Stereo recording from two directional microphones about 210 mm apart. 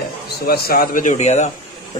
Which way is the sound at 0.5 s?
45° left (ahead or behind).